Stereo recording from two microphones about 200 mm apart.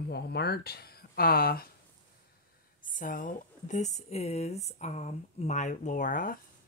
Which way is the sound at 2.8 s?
40° left (ahead or behind).